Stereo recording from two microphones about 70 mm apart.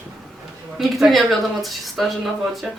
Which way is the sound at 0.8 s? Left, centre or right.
Centre.